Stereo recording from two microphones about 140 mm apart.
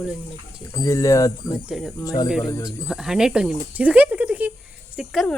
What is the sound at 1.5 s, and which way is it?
Speech, 5° right (ahead or behind).